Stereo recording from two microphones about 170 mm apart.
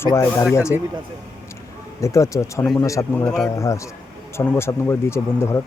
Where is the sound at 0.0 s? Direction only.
15° left (ahead or behind).